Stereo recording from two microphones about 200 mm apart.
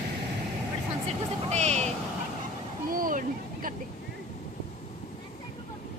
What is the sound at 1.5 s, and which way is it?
Vehicle, 35° right (ahead or behind).